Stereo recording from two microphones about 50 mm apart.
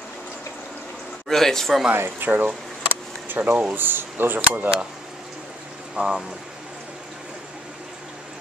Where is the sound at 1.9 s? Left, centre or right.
Right.